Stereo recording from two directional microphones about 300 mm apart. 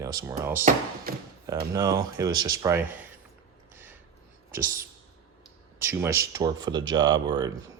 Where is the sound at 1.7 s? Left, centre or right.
Centre.